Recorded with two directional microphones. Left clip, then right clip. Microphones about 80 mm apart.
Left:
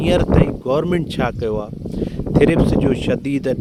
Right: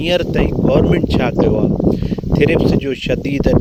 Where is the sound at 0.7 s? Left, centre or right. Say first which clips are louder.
Right 7 dB; left.